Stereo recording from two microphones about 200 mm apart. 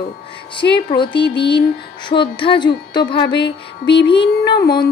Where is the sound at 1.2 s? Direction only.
55° left (ahead or behind).